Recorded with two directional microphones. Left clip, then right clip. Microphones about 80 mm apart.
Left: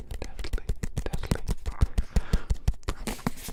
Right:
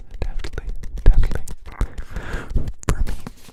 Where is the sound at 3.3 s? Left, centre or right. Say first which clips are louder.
Left 6 dB; left.